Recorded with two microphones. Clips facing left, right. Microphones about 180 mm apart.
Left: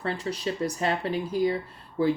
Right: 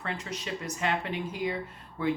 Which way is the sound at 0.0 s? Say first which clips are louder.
Left 7 dB; 35° left (ahead or behind).